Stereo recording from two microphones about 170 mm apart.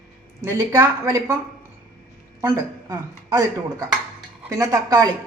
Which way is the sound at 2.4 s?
15° right (ahead or behind).